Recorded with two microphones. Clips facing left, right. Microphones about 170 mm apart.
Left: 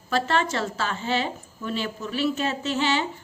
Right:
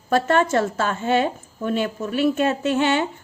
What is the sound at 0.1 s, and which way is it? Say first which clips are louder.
A woman's voice: right 6 dB; 50° right (ahead or behind).